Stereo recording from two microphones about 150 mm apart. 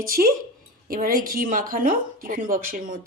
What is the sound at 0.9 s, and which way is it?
Speech, 70° right (ahead or behind).